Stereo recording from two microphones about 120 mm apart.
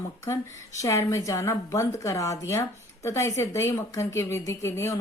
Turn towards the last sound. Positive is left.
turn(degrees=20)  # may be behind; listen again after turning